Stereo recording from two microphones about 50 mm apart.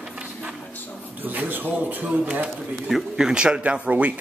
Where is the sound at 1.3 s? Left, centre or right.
Right.